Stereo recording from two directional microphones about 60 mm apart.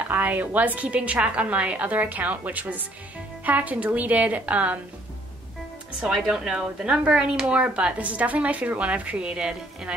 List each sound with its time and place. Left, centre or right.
0.1 s speech: right
6.1 s speech: centre